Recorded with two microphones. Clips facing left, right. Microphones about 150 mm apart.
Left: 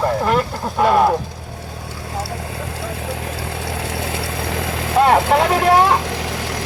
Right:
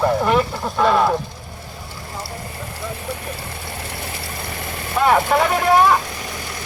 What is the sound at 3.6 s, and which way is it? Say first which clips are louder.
Vehicle: left 7 dB; 90° left.